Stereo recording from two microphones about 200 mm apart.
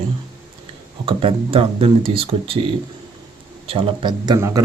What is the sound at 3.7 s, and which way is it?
Speech, 25° right (ahead or behind).